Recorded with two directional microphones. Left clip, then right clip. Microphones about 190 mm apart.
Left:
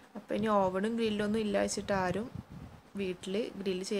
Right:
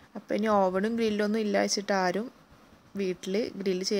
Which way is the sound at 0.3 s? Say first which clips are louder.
Right 4 dB; 25° right (ahead or behind).